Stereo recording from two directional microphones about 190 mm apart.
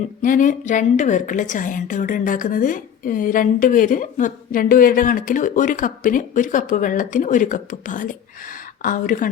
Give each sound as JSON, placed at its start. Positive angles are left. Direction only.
{"t": 0.2, "sound": "a woman's voice", "side_deg": 45}